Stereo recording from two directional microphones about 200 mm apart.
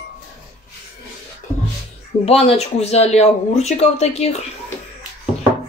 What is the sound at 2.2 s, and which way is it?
Speech, 30° left (ahead or behind).